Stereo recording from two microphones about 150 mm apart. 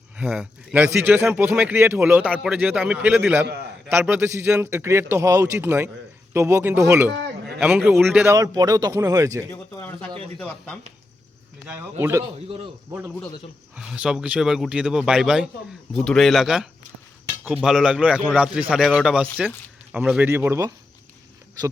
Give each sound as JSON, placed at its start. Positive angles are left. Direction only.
{"t": 0.2, "sound": "speech", "side_deg": -5}
{"t": 4.6, "sound": "speech", "side_deg": -20}
{"t": 7.6, "sound": "speech", "side_deg": -5}
{"t": 8.0, "sound": "speech", "side_deg": -15}
{"t": 9.5, "sound": "speech", "side_deg": 15}
{"t": 10.3, "sound": "a man's voice", "side_deg": 5}
{"t": 11.6, "sound": "speech", "side_deg": -15}
{"t": 13.7, "sound": "a man's voice", "side_deg": -5}